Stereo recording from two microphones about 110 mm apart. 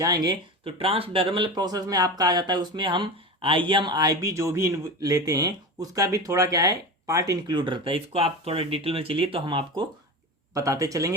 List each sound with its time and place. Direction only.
0.0 s speech: 35° right (ahead or behind)
0.6 s speech: 60° right (ahead or behind); by 7.5 s 30° right (ahead or behind)
7.5 s speech: 50° right (ahead or behind)
10.5 s speech: 30° right (ahead or behind)